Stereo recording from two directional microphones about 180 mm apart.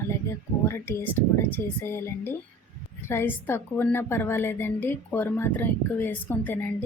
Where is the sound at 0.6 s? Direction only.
15° left (ahead or behind).